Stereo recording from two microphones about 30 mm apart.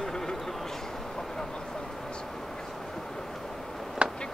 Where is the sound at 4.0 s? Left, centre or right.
Right.